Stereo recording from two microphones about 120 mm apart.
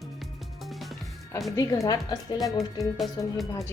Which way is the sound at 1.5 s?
30° left (ahead or behind).